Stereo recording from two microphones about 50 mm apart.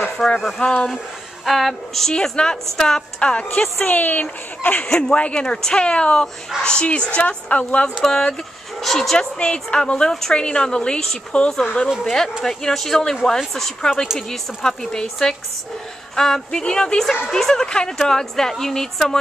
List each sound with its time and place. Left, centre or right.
0.2 s speech: centre
0.6 s speech: left
1.4 s speech: centre
2.1 s a woman's voice: centre
3.8 s a woman's voice: left
4.9 s a woman's voice: left
8.0 s a woman's voice: centre
9.4 s a woman's voice: centre
16.2 s a woman's voice: centre